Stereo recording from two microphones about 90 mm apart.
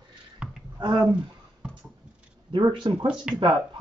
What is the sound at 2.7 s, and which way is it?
Speech, 60° right (ahead or behind).